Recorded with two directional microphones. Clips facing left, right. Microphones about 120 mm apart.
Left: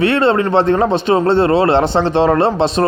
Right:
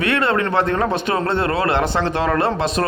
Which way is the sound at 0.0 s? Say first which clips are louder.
Left 6 dB; 30° left (ahead or behind).